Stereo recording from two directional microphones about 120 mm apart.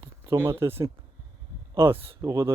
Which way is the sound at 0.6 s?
20° right (ahead or behind).